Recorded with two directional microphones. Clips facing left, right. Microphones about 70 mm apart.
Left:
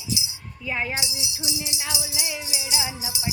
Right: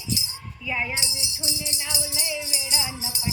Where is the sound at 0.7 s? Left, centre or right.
Left.